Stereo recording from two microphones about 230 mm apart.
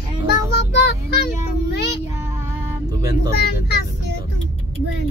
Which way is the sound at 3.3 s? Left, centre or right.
Left.